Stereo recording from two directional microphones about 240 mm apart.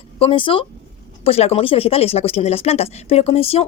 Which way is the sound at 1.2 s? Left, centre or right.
Left.